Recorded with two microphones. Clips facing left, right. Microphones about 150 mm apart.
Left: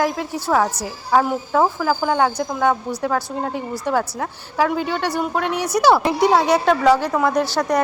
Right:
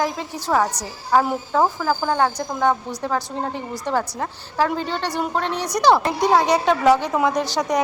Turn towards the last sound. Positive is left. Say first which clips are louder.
# left 2 dB
turn(degrees=-5)  # may be behind; listen again after turning